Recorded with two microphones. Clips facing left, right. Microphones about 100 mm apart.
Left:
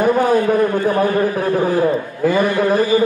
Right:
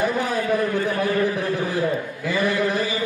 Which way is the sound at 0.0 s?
45° left (ahead or behind).